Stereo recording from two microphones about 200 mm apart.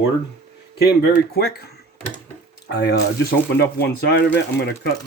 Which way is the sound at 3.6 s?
55° left (ahead or behind).